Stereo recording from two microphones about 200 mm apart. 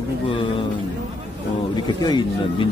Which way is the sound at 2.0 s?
20° left (ahead or behind).